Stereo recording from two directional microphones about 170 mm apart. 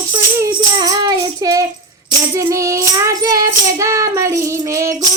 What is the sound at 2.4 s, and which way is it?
Child singing, 20° right (ahead or behind).